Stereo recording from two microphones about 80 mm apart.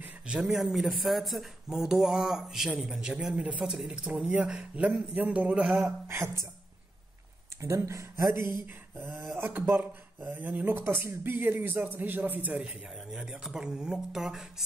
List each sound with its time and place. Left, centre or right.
0.4 s speech: centre
6.0 s speech: right
7.6 s speech: right; by 14.5 s centre